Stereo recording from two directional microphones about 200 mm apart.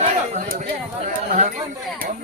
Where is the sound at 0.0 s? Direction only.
40° right (ahead or behind).